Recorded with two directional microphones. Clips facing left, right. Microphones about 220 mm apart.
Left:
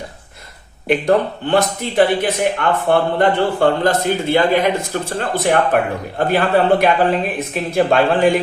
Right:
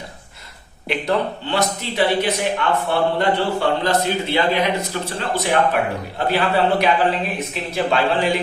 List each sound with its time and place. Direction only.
0.9 s a man's voice: 50° left (ahead or behind)